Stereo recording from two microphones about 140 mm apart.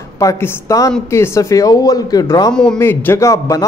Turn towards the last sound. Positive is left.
turn(degrees=20)  # may be behind; listen again after turning